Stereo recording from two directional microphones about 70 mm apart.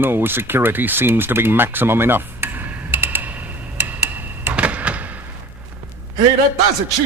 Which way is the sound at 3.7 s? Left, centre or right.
Right.